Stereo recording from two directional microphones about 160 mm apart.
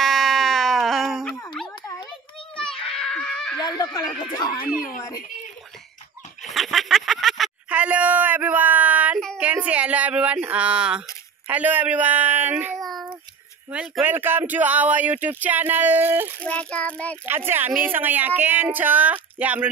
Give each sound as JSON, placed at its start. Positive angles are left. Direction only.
{"t": 0.0, "sound": "a sound", "side_deg": 0}
{"t": 2.5, "sound": "screaming", "side_deg": 5}
{"t": 3.5, "sound": "speech", "side_deg": 25}
{"t": 6.5, "sound": "quack", "side_deg": 0}
{"t": 9.4, "sound": "a sound", "side_deg": -10}
{"t": 11.4, "sound": "speech", "side_deg": -10}
{"t": 12.7, "sound": "child singing", "side_deg": 0}
{"t": 13.7, "sound": "speech", "side_deg": -5}
{"t": 16.4, "sound": "child singing", "side_deg": 10}
{"t": 17.3, "sound": "speech", "side_deg": -15}